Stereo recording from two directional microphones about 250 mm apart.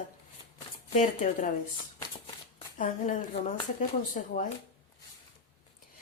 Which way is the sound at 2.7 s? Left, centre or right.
Left.